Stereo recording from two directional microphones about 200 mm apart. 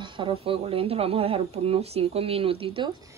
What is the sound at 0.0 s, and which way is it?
Speech, 25° right (ahead or behind).